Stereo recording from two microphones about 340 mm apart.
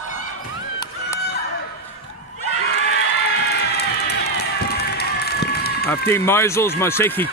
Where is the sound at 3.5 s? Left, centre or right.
Left.